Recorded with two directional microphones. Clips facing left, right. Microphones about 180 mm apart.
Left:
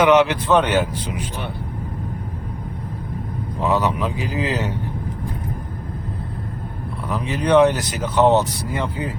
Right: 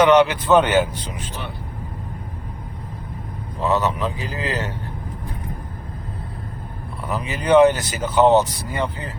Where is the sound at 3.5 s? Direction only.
15° left (ahead or behind).